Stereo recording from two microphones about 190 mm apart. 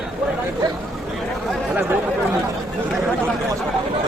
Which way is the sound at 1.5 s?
Centre (ahead or behind).